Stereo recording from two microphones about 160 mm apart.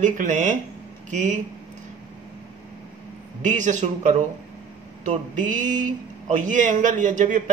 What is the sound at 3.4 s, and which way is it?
Speech, 50° right (ahead or behind).